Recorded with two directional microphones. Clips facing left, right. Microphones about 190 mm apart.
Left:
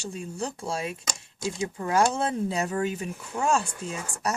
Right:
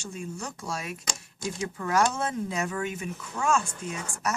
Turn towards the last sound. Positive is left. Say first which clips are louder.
# left 1 dB
turn(degrees=35)  # may be behind; listen again after turning